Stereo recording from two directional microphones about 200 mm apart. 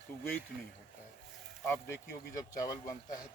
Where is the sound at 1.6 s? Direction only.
10° left (ahead or behind).